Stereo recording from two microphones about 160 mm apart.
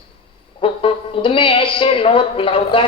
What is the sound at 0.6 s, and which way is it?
A woman's voice, 35° left (ahead or behind).